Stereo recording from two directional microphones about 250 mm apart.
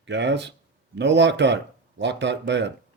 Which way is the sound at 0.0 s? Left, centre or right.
Right.